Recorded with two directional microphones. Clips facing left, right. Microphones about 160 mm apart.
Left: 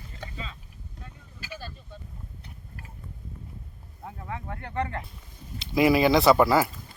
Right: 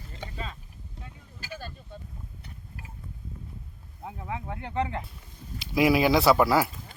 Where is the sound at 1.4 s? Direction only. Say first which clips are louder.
Even; 45° right (ahead or behind).